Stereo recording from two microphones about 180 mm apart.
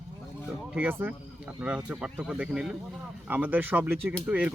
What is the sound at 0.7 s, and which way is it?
Speech, 10° right (ahead or behind).